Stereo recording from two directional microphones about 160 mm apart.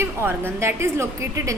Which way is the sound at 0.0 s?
15° right (ahead or behind).